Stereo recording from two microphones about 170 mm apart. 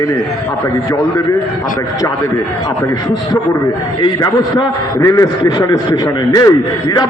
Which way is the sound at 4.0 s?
25° left (ahead or behind).